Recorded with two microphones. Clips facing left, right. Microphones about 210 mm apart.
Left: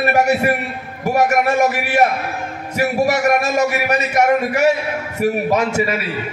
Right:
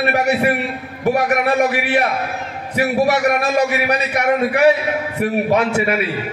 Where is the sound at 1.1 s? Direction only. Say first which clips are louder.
Left 2 dB; 45° left (ahead or behind).